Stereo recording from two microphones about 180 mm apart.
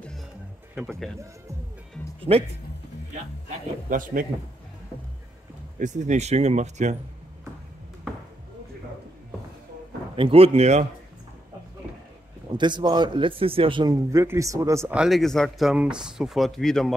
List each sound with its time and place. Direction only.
0.7 s speech: centre (ahead or behind)
2.3 s speech: 35° right (ahead or behind)
3.4 s a man's voice: 45° right (ahead or behind)
5.8 s speech: 40° right (ahead or behind)
10.1 s speech: 30° right (ahead or behind)
12.5 s speech: 25° right (ahead or behind)
15.0 s speech: centre (ahead or behind)